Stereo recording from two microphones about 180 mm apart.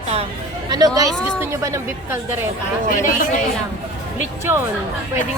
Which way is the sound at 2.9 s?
45° left (ahead or behind).